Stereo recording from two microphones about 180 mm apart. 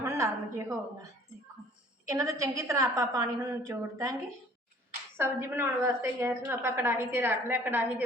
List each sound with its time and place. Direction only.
0.0 s a sound: 15° right (ahead or behind)
2.0 s a woman's voice: 20° right (ahead or behind)
5.1 s a woman's voice: 15° right (ahead or behind)